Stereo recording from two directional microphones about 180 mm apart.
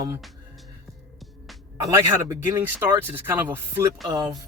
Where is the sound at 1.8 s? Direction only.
20° right (ahead or behind).